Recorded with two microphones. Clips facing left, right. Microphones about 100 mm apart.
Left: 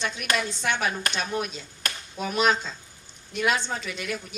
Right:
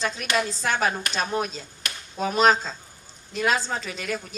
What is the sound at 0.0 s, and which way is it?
A woman's voice, 35° right (ahead or behind).